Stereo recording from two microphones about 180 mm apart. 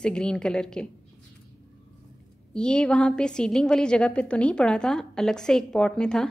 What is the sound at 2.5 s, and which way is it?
A woman's voice, 5° left (ahead or behind).